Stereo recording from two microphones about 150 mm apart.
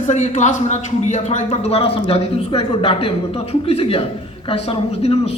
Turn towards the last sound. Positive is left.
turn(degrees=40)  # may be behind; listen again after turning